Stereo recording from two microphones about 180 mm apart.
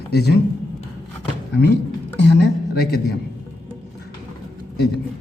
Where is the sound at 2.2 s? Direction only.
70° left (ahead or behind).